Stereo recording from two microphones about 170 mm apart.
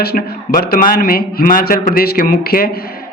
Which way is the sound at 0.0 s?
65° left (ahead or behind).